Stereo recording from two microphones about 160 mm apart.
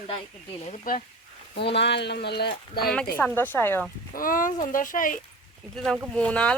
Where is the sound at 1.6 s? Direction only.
90° left.